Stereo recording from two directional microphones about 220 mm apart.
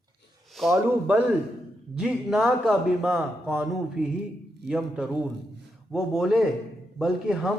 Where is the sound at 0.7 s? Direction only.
5° right (ahead or behind).